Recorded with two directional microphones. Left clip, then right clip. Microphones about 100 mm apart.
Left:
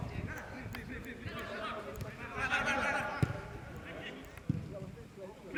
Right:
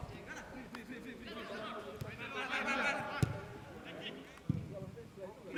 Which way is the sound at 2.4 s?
15° left (ahead or behind).